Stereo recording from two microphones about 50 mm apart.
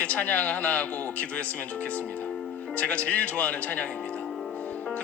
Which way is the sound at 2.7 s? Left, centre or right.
Left.